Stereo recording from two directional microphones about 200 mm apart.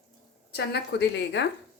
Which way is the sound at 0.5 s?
55° left (ahead or behind).